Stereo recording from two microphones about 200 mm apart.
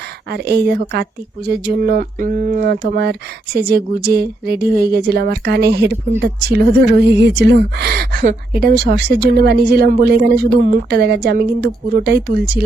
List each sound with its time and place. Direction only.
0.3 s speech: 55° right (ahead or behind)